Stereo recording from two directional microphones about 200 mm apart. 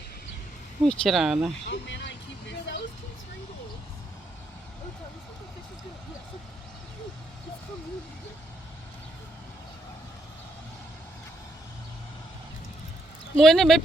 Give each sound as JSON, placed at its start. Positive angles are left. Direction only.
{"t": 0.9, "sound": "speech", "side_deg": 0}
{"t": 1.6, "sound": "vehicle", "side_deg": 60}
{"t": 13.3, "sound": "speech", "side_deg": 0}